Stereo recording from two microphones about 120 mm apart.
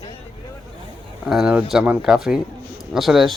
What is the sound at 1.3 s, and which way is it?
A man's voice, 5° right (ahead or behind).